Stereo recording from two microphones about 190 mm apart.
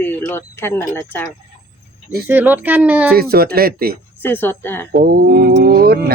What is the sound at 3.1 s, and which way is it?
Speech, 55° right (ahead or behind).